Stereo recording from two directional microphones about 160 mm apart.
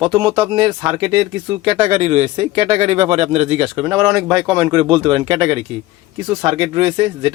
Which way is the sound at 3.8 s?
20° right (ahead or behind).